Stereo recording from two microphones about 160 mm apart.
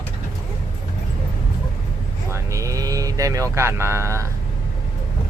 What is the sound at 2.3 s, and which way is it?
Speech, 20° right (ahead or behind).